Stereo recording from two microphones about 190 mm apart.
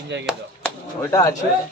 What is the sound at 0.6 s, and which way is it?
Chop, 15° left (ahead or behind).